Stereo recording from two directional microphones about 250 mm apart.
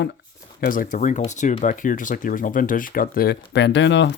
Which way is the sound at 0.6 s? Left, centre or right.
Left.